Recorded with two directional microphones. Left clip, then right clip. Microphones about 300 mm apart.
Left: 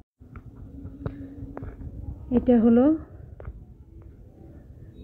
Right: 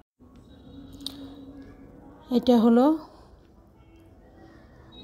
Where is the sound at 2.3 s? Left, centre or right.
Right.